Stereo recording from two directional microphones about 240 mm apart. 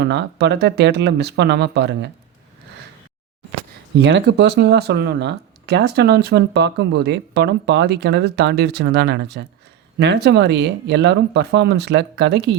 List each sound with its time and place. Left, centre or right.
0.0 s speech: right
3.9 s speech: right